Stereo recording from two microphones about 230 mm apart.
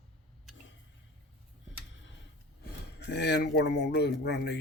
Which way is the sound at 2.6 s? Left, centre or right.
Left.